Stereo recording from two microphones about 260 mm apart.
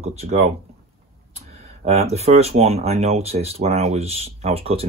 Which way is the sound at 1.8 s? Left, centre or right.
Right.